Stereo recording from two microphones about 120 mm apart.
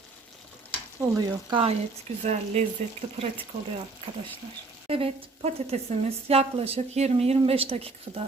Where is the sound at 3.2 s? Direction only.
55° right (ahead or behind).